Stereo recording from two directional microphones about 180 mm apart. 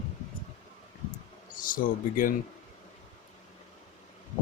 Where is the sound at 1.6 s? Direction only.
50° left (ahead or behind).